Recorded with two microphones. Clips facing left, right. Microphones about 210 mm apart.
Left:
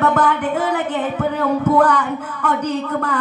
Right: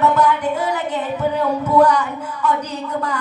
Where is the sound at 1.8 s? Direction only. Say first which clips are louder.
Right 1 dB; 55° left (ahead or behind).